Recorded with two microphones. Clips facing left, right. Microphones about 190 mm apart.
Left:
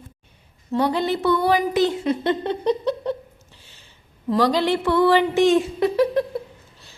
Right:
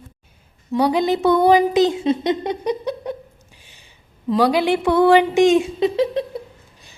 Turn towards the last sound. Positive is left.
turn(degrees=-20)  # may be behind; listen again after turning